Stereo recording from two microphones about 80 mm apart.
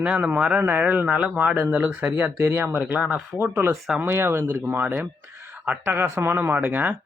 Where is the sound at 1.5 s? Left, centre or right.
Right.